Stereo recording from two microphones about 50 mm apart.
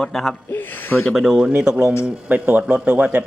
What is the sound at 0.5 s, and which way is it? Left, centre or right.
Speech, left.